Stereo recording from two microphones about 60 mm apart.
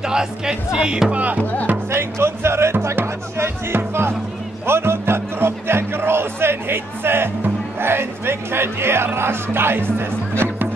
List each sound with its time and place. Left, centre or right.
0.0 s speech: centre
1.1 s speech: right
1.9 s speech: right